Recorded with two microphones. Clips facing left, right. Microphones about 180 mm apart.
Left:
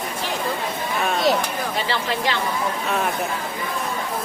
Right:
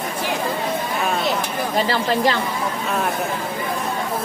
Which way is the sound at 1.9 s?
40° right (ahead or behind).